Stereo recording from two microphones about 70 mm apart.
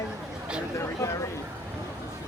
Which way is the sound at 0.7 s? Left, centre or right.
Left.